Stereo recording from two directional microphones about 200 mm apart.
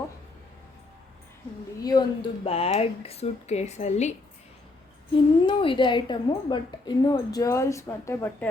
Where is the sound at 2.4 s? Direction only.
30° left (ahead or behind).